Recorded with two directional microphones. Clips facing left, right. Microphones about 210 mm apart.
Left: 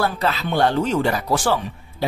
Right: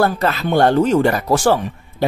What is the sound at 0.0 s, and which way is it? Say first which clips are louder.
Speech: right 5 dB; 50° right (ahead or behind).